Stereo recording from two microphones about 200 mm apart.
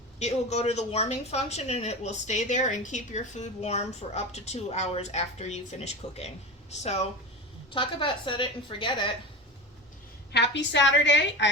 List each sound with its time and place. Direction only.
0.2 s a woman's voice: 30° left (ahead or behind)
10.3 s a woman's voice: 60° left (ahead or behind)